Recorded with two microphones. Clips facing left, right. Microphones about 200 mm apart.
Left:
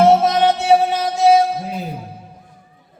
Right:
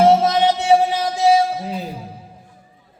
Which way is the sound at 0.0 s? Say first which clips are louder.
Left 1 dB; 55° left (ahead or behind).